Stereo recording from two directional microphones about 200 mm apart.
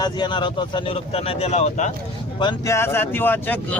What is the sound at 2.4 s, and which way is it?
Speech, 20° left (ahead or behind).